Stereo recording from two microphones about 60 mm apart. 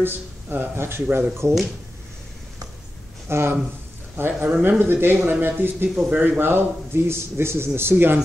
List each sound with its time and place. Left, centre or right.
0.0 s speech: right
1.4 s speech: right
3.3 s speech: right
4.3 s speech: right